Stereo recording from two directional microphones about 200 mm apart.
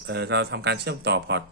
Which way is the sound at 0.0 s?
60° right (ahead or behind).